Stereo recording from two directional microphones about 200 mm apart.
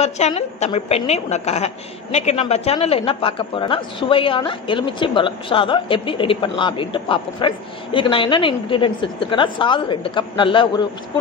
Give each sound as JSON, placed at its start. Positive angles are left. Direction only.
{"t": 0.0, "sound": "a woman's voice", "side_deg": 30}